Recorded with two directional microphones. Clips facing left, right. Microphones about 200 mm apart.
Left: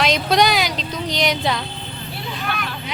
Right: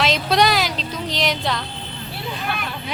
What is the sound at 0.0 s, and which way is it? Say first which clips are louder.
Speech: left 1 dB; centre (ahead or behind).